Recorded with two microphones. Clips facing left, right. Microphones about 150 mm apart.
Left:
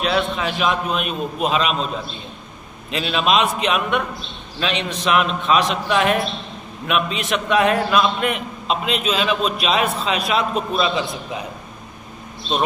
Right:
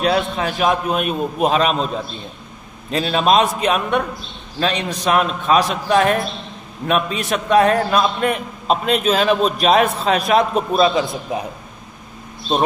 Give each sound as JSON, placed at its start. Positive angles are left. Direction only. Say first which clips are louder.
{"t": 0.0, "sound": "a man's voice", "louder": "right 2 dB", "side_deg": -40}
{"t": 2.9, "sound": "a man's voice", "louder": "right 3 dB", "side_deg": -35}
{"t": 7.2, "sound": "a man's voice", "louder": "right 5 dB", "side_deg": -40}